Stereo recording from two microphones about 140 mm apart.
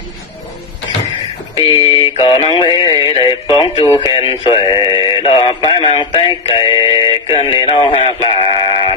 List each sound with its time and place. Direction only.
1.5 s music: 40° left (ahead or behind)